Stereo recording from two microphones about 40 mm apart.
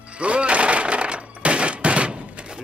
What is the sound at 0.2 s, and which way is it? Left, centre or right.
Breaking, right.